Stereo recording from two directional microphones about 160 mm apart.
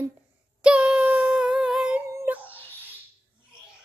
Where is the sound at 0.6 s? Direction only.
5° right (ahead or behind).